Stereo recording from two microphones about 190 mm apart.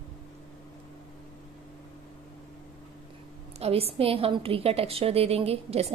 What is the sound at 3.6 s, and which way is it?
A woman's voice, 30° right (ahead or behind).